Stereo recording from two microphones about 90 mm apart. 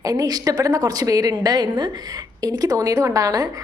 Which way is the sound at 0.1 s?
40° right (ahead or behind).